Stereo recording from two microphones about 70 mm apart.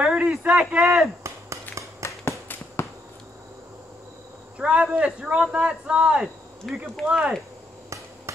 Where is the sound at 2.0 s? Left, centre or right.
Left.